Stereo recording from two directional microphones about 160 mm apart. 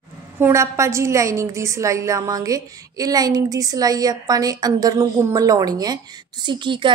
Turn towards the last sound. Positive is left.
turn(degrees=-30)  # may be behind; listen again after turning